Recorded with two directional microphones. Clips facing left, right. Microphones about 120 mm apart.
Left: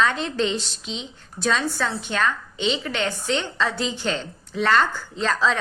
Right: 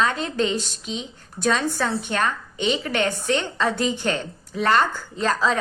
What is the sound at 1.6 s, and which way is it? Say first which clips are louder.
Speech: right 1 dB; 15° right (ahead or behind).